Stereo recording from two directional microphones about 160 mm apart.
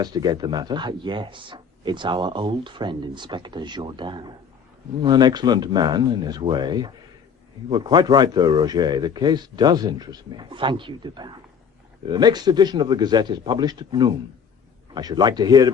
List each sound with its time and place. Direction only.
0.0 s speech: 25° right (ahead or behind)